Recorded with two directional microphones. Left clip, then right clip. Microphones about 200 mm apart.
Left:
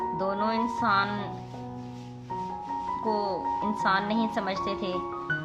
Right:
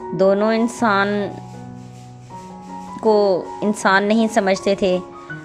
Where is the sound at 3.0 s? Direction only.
40° right (ahead or behind).